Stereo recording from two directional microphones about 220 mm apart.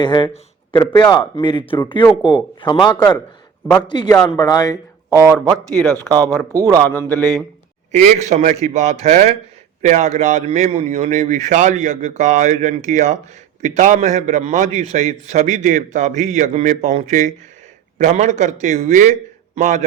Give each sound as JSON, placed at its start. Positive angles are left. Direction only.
{"t": 0.0, "sound": "a man's voice", "side_deg": 20}
{"t": 6.1, "sound": "speech", "side_deg": 0}
{"t": 6.5, "sound": "a man's voice", "side_deg": -15}
{"t": 6.8, "sound": "a sound", "side_deg": 5}
{"t": 7.9, "sound": "a man's voice", "side_deg": -30}